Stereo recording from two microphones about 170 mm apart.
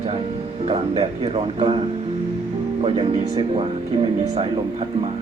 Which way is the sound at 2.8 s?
35° right (ahead or behind).